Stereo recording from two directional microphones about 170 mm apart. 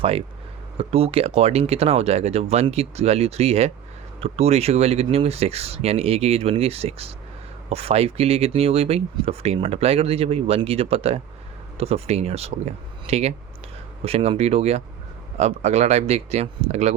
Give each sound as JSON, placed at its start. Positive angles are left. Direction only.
{"t": 0.8, "sound": "speech", "side_deg": -35}